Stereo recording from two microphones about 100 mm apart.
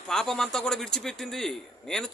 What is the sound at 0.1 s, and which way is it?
A man's voice, 5° left (ahead or behind).